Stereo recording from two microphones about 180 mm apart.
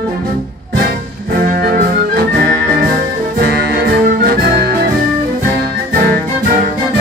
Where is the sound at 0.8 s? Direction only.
55° right (ahead or behind).